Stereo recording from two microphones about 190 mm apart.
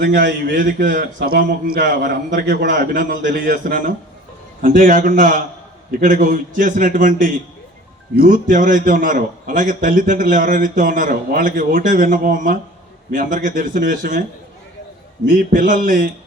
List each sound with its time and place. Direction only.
0.0 s a man's voice: 60° right (ahead or behind)
15.3 s a man's voice: 45° right (ahead or behind)